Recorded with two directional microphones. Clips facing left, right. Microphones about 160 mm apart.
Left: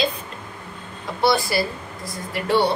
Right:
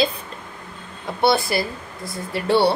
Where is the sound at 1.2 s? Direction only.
20° right (ahead or behind).